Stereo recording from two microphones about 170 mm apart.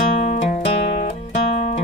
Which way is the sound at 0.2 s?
40° left (ahead or behind).